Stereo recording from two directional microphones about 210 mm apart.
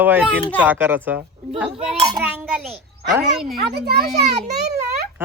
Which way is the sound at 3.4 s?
50° right (ahead or behind).